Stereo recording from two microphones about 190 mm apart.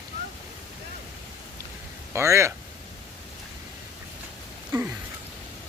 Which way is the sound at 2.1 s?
15° right (ahead or behind).